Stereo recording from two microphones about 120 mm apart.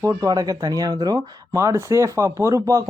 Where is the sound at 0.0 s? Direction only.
25° right (ahead or behind).